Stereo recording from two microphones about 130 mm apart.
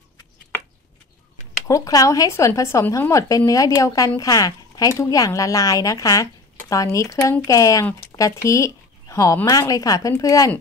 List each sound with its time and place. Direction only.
1.7 s speech: 25° left (ahead or behind)